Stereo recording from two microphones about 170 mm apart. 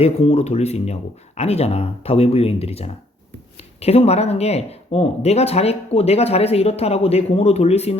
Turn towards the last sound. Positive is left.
turn(degrees=40)  # may be behind; listen again after turning